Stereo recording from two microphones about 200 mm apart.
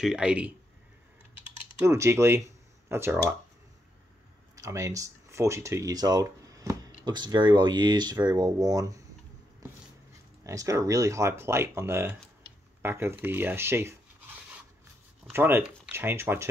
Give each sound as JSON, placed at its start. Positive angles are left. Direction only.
{"t": 0.0, "sound": "speech", "side_deg": -5}
{"t": 1.8, "sound": "speech", "side_deg": -15}
{"t": 4.6, "sound": "speech", "side_deg": -15}
{"t": 10.4, "sound": "speech", "side_deg": -15}